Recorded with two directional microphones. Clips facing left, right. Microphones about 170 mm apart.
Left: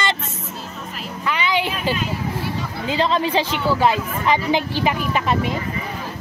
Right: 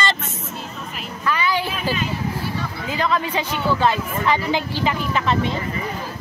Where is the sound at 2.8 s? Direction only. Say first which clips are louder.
Left 3 dB; 25° left (ahead or behind).